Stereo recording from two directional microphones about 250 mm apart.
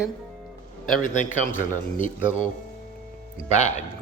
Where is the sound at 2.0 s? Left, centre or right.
Left.